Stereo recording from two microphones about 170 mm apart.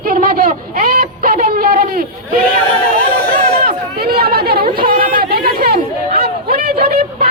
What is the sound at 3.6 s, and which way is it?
Chatter, 65° right (ahead or behind).